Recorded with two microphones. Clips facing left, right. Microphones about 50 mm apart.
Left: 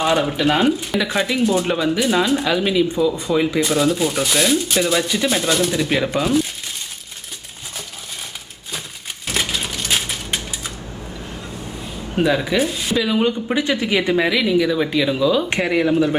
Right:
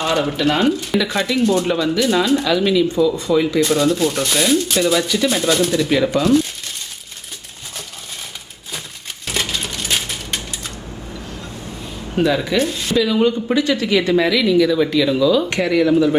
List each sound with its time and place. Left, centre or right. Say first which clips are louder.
0.0 s speech: even; centre
9.2 s a sound: even; centre
12.1 s speech: right 1 dB; centre